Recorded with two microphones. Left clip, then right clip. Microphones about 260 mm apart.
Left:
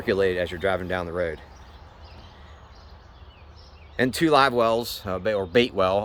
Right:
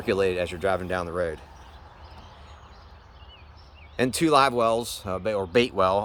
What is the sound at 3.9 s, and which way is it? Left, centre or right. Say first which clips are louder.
Speech: left 1 dB; centre.